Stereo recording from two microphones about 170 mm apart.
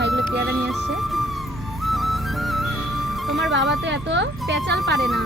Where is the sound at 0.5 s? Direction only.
Centre (ahead or behind).